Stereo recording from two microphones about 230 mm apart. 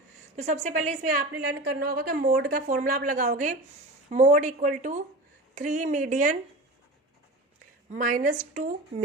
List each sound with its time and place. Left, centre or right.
0.3 s a woman's voice: right
7.9 s a woman's voice: right